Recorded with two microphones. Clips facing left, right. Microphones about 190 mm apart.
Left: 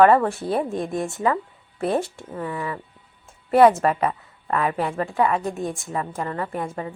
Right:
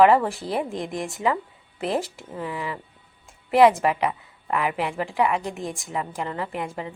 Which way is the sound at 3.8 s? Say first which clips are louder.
Left 2 dB; 15° right (ahead or behind).